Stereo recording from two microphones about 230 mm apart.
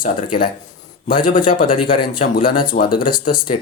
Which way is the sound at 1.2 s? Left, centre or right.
Left.